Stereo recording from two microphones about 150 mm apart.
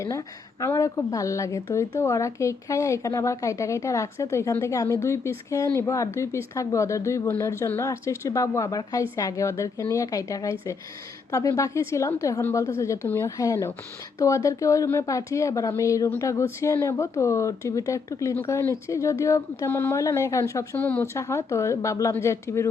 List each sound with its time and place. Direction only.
0.6 s speech: 20° left (ahead or behind)